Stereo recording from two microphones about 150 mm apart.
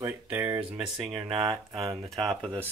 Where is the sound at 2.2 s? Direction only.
Centre (ahead or behind).